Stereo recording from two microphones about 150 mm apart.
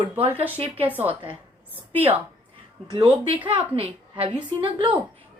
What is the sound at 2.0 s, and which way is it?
Speech, 40° right (ahead or behind).